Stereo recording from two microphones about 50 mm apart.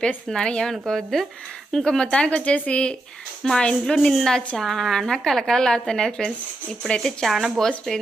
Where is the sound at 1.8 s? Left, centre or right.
Centre.